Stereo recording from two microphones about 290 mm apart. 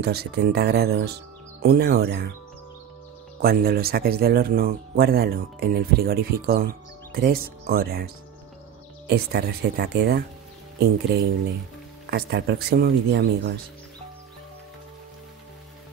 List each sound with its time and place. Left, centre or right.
0.0 s speech: right
3.4 s speech: right